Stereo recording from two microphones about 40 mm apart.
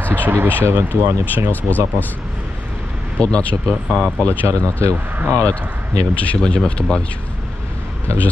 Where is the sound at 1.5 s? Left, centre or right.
Left.